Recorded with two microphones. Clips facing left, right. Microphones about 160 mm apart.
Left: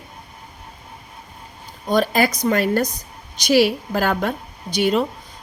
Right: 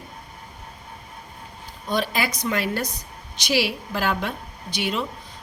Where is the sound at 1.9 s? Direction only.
45° left (ahead or behind).